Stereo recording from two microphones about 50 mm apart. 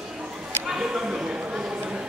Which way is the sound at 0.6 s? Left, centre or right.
Centre.